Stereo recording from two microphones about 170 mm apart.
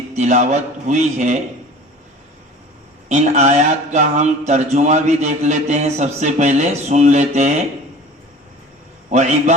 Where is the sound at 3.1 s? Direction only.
40° right (ahead or behind).